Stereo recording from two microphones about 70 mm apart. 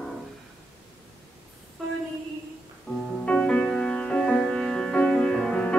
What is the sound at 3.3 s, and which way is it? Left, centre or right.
Music, centre.